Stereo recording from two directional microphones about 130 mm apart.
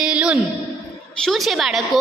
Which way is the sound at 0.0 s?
10° right (ahead or behind).